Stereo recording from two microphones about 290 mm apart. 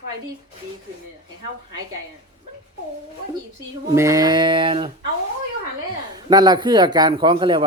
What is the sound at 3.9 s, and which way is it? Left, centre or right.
Speech, centre.